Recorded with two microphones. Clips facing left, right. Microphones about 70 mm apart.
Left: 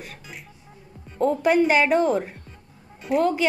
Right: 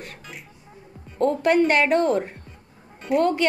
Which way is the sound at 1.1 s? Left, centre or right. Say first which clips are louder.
Even; centre.